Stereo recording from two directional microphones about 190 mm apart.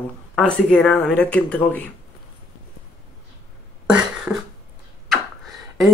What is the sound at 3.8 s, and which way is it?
Beatboxing, 5° right (ahead or behind).